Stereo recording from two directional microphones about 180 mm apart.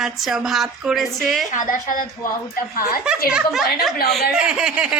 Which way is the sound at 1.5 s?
45° left (ahead or behind).